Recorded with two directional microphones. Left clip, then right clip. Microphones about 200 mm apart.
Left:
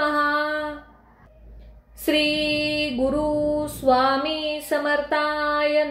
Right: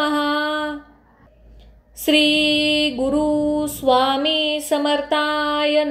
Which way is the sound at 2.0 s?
25° right (ahead or behind).